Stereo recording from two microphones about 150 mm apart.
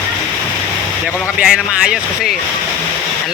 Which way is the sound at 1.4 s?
5° right (ahead or behind).